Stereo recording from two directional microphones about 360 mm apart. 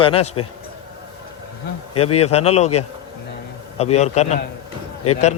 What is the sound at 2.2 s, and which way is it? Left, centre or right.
Speech, centre.